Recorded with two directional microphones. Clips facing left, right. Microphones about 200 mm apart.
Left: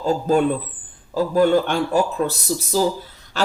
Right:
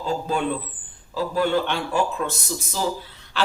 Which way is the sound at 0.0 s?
45° left (ahead or behind).